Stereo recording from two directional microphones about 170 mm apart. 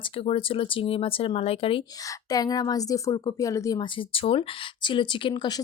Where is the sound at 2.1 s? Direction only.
20° left (ahead or behind).